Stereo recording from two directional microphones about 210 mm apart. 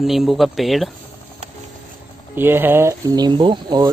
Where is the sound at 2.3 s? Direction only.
10° right (ahead or behind).